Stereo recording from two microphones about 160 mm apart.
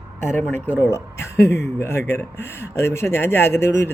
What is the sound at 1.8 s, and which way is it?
A man's voice, 15° left (ahead or behind).